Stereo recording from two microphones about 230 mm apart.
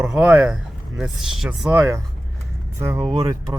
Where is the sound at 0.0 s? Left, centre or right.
Centre.